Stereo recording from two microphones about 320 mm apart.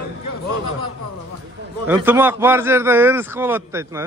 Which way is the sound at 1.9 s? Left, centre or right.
Centre.